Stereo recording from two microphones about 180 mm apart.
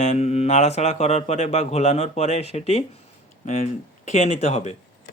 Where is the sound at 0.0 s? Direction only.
40° left (ahead or behind).